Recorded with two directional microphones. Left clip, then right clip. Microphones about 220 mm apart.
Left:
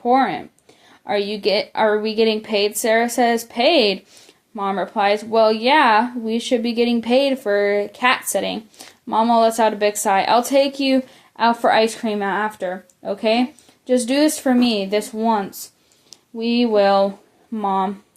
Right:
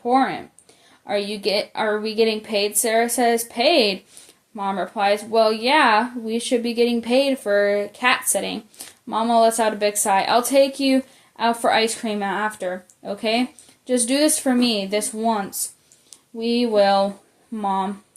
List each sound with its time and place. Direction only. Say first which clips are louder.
0.0 s speech: left 2 dB; 30° left (ahead or behind)